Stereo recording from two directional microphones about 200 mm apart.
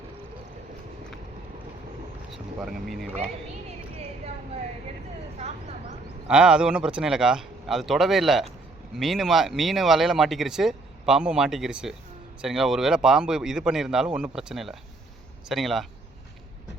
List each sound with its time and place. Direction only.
2.3 s speech: centre (ahead or behind)
5.4 s speech: 30° right (ahead or behind)
6.2 s speech: 5° right (ahead or behind)